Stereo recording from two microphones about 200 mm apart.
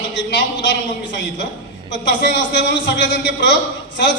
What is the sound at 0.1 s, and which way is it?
Speech, 65° left (ahead or behind).